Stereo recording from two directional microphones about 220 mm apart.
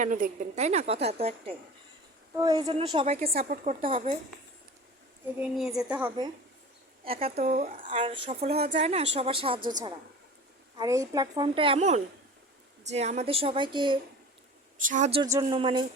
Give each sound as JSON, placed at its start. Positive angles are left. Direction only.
{"t": 0.0, "sound": "speech", "side_deg": -35}
{"t": 5.4, "sound": "a woman's voice", "side_deg": 0}
{"t": 7.2, "sound": "speech", "side_deg": -25}
{"t": 10.8, "sound": "speech", "side_deg": -15}
{"t": 14.8, "sound": "speech", "side_deg": -35}
{"t": 15.2, "sound": "speech", "side_deg": -20}